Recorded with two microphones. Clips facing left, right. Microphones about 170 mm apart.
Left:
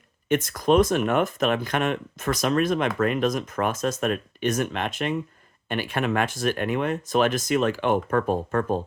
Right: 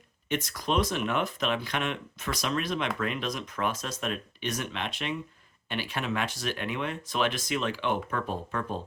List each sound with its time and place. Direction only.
0.3 s speech: 50° left (ahead or behind)